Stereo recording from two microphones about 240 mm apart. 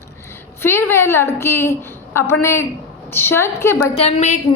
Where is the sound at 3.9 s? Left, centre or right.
Left.